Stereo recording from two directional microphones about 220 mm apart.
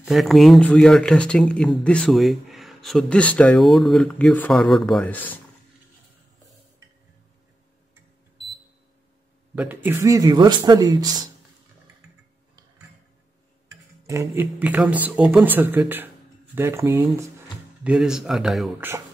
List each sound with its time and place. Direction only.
0.0 s speech: centre (ahead or behind)
9.6 s speech: 10° right (ahead or behind)
13.7 s speech: 10° right (ahead or behind)
17.8 s speech: 5° right (ahead or behind)